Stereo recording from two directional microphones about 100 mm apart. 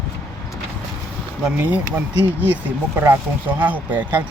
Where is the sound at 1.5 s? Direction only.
15° right (ahead or behind).